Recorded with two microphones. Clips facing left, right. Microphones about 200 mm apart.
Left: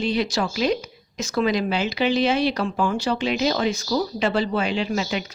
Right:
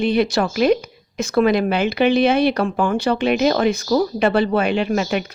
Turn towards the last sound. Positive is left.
turn(degrees=-55)  # may be behind; listen again after turning